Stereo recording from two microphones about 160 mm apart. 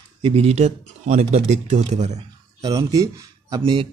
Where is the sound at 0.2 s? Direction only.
40° right (ahead or behind).